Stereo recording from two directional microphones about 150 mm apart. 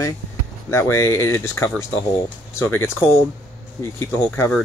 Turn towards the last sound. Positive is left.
turn(degrees=15)  # may be behind; listen again after turning